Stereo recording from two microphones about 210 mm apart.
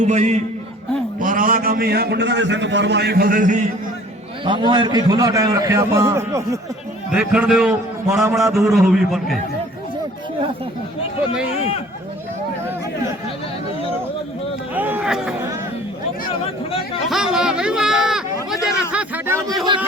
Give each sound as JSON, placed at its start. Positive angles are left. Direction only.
{"t": 0.0, "sound": "a man's voice", "side_deg": -35}
{"t": 4.4, "sound": "a man's voice", "side_deg": -20}
{"t": 7.1, "sound": "a man's voice", "side_deg": -5}
{"t": 14.8, "sound": "speech", "side_deg": -10}
{"t": 17.1, "sound": "a man's voice", "side_deg": 0}